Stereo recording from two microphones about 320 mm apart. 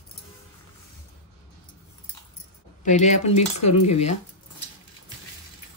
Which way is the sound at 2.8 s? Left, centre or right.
Left.